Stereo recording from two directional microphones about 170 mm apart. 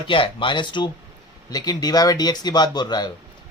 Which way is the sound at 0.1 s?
30° left (ahead or behind).